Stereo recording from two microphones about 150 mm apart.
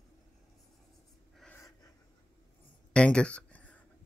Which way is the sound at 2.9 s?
5° left (ahead or behind).